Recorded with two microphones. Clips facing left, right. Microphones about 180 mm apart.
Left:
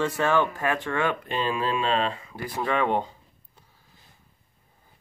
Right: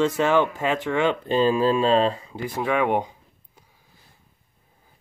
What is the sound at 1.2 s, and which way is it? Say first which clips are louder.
Speech: right 8 dB; 35° right (ahead or behind).